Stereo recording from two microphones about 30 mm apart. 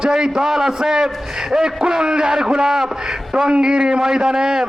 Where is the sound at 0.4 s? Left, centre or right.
Centre.